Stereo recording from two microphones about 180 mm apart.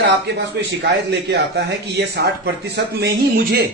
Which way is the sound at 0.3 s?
70° right (ahead or behind).